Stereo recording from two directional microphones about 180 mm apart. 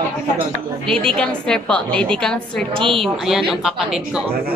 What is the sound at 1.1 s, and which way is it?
A woman's voice, 5° left (ahead or behind).